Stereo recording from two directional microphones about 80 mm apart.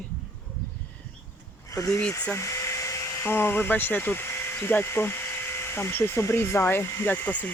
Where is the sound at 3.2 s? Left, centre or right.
Left.